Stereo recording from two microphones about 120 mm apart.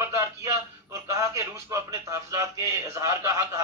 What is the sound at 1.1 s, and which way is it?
Speech, 25° right (ahead or behind).